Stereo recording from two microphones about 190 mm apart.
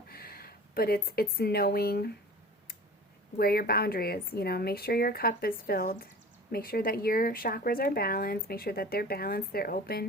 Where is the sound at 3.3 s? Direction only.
55° left (ahead or behind).